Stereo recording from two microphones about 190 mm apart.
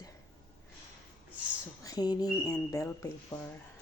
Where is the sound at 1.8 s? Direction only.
20° left (ahead or behind).